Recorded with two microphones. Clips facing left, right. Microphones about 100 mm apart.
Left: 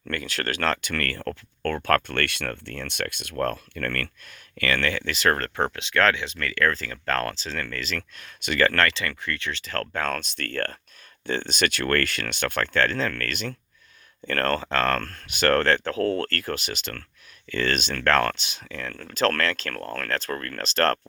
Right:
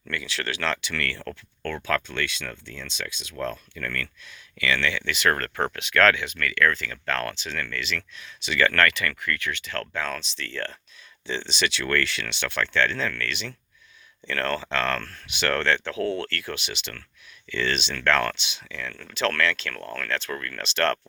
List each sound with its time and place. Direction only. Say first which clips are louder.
0.1 s speech: left 2 dB; 45° left (ahead or behind)
2.0 s speech: left 3 dB; 60° left (ahead or behind)
4.5 s speech: left 1 dB; 45° left (ahead or behind)